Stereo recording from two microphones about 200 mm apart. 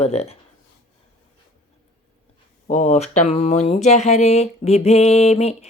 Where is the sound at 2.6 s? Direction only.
35° left (ahead or behind).